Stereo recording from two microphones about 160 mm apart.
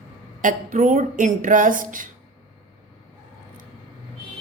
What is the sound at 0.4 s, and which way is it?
Speech, 55° right (ahead or behind).